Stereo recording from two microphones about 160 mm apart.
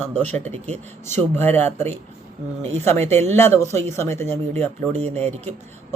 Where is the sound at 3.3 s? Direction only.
15° left (ahead or behind).